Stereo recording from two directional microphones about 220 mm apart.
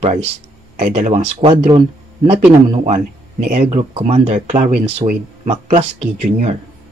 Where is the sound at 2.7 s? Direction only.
25° right (ahead or behind).